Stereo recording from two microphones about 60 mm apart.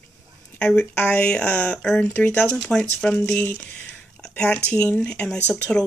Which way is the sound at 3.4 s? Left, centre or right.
Left.